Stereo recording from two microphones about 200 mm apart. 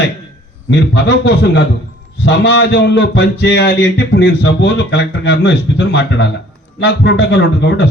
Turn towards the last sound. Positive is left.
turn(degrees=60)  # may be behind; listen again after turning